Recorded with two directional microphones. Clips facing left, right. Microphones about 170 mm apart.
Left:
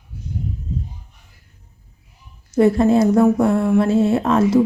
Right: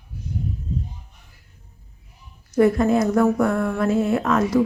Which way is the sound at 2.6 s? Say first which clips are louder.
Left 3 dB; 30° left (ahead or behind).